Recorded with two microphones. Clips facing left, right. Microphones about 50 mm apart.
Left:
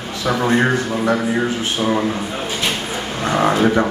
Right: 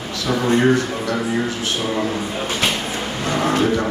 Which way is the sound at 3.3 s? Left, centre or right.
Left.